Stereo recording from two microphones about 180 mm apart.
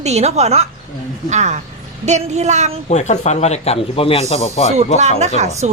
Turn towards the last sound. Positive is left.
turn(degrees=-40)  # may be behind; listen again after turning